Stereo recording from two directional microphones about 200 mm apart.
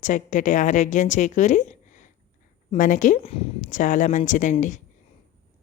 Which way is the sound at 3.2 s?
30° left (ahead or behind).